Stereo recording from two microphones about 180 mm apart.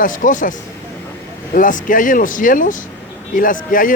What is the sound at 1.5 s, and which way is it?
Speech, 50° left (ahead or behind).